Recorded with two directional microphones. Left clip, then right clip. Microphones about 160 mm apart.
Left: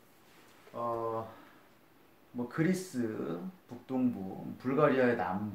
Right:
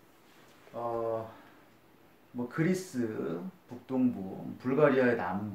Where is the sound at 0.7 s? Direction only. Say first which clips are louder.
Even; 30° left (ahead or behind).